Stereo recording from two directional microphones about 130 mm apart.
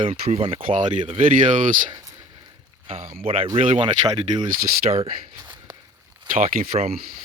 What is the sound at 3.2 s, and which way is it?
Speech, 45° right (ahead or behind).